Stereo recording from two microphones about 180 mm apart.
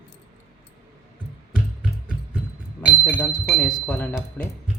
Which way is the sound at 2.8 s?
10° left (ahead or behind).